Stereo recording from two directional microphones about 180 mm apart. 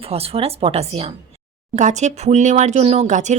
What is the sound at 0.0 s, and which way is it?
Speech, 35° right (ahead or behind).